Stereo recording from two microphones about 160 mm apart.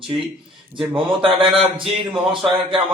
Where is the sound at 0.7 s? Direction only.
35° right (ahead or behind).